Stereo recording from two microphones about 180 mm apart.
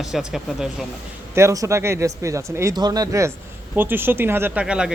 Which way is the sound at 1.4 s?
15° right (ahead or behind).